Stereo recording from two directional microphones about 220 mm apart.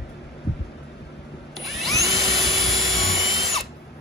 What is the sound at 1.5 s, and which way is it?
Tools, centre (ahead or behind).